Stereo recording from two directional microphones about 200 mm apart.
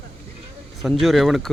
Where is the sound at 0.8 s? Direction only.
Centre (ahead or behind).